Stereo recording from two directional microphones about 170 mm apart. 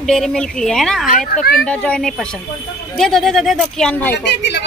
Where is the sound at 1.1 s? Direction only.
50° left (ahead or behind).